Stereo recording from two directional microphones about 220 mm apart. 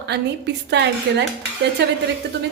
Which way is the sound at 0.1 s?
50° right (ahead or behind).